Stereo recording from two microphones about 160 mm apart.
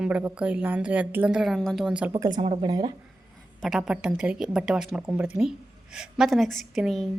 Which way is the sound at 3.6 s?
Centre (ahead or behind).